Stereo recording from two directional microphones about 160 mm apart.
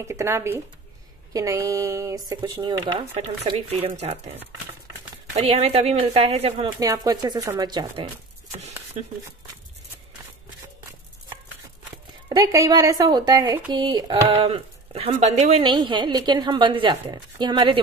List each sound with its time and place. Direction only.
0.0 s a woman's voice: 15° right (ahead or behind)
3.2 s speech: 40° right (ahead or behind)
6.8 s a woman's voice: 20° right (ahead or behind)
8.5 s a sound: 45° right (ahead or behind)
12.3 s a woman's voice: 25° right (ahead or behind); by 15.6 s 45° right (ahead or behind)
15.6 s a woman's voice: 30° right (ahead or behind)